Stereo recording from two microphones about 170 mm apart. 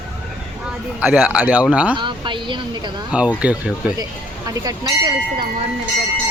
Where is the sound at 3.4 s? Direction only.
5° right (ahead or behind).